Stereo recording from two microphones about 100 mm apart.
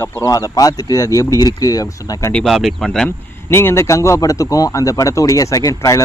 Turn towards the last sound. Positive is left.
turn(degrees=35)  # may be behind; listen again after turning